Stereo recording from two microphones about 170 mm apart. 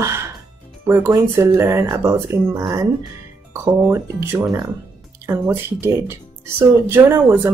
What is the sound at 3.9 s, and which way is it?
Speech, 20° right (ahead or behind).